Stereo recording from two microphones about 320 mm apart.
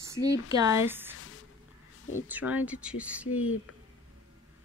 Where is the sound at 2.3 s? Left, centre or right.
Centre.